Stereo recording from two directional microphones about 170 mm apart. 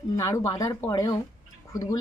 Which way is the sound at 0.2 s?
20° left (ahead or behind).